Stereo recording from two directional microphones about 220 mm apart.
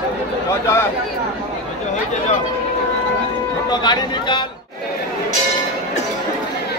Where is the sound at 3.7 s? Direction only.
20° left (ahead or behind).